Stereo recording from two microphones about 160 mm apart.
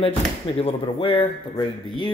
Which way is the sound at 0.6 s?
35° left (ahead or behind).